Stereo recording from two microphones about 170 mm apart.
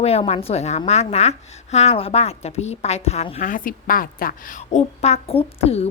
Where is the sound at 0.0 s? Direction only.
35° left (ahead or behind).